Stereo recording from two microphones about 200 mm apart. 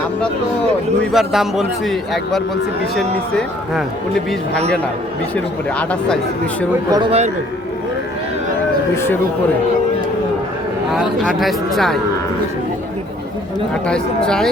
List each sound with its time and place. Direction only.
1.1 s a man's voice: centre (ahead or behind)
6.9 s a man's voice: 25° right (ahead or behind)
10.9 s a man's voice: 5° right (ahead or behind)
13.8 s a man's voice: 5° left (ahead or behind)